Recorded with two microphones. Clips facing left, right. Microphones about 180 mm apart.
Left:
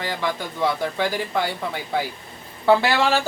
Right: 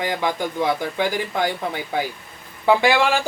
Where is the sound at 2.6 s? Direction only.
15° right (ahead or behind).